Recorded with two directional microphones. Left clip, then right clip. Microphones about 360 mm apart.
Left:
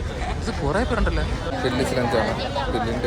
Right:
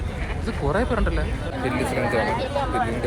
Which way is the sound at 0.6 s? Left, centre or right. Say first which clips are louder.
Even; centre.